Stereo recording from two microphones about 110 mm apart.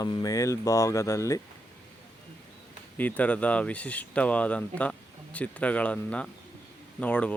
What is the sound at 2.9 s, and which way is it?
Speech, 15° left (ahead or behind).